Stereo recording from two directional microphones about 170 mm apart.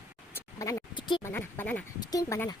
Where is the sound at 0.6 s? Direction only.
25° left (ahead or behind).